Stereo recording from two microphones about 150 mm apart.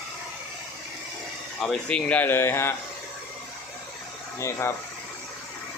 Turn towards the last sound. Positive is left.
turn(degrees=20)  # may be behind; listen again after turning